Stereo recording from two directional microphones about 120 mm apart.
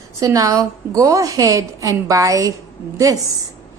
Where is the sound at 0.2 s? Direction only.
30° right (ahead or behind).